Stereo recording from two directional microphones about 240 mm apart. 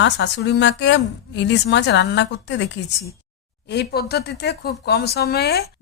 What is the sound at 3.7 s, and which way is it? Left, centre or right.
A woman's voice, left.